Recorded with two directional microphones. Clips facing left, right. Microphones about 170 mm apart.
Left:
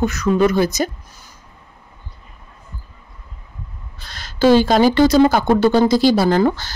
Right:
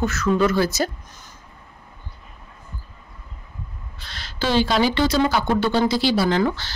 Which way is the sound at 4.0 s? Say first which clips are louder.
Left 11 dB; 45° left (ahead or behind).